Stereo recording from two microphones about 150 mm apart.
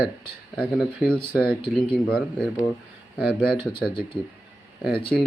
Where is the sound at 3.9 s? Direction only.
35° left (ahead or behind).